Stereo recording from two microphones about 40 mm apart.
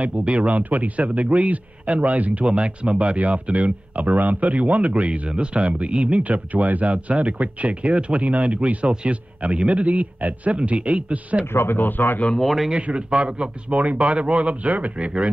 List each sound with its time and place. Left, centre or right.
0.0 s speech: right
0.5 s speech: right
2.4 s speech: right
11.5 s speech: left
12.4 s a man's voice: centre
12.9 s speech: right
13.7 s speech: right